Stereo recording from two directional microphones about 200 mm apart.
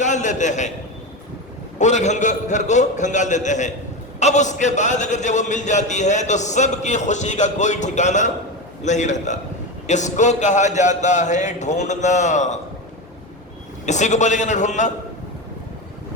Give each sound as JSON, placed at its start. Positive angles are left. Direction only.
{"t": 0.0, "sound": "a man's voice", "side_deg": 35}
{"t": 1.8, "sound": "a man's voice", "side_deg": 35}
{"t": 13.8, "sound": "a man's voice", "side_deg": 35}